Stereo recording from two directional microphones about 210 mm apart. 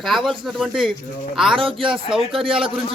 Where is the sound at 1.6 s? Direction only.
25° right (ahead or behind).